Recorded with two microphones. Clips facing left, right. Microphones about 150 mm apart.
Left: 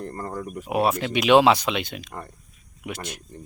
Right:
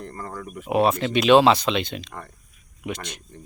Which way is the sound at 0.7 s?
10° left (ahead or behind).